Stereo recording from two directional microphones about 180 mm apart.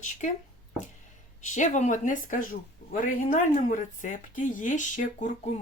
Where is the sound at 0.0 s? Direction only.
45° left (ahead or behind).